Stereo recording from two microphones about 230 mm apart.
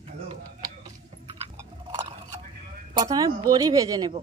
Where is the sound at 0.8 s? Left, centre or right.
Centre.